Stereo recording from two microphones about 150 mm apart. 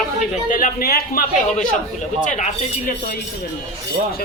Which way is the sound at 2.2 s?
55° left (ahead or behind).